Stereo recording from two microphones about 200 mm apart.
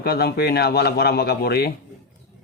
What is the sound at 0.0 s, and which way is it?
Speech, 50° left (ahead or behind).